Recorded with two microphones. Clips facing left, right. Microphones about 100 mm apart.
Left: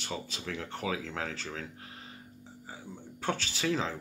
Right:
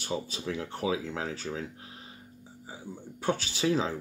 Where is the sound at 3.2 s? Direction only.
15° right (ahead or behind).